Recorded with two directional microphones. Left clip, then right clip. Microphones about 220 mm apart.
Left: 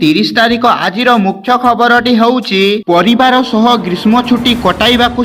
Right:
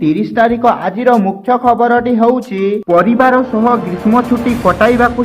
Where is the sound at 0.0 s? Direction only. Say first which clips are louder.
Left 2 dB; 15° left (ahead or behind).